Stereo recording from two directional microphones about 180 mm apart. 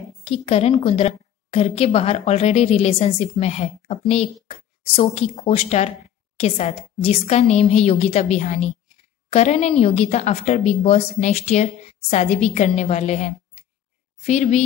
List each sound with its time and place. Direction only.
0.2 s speech: 30° left (ahead or behind)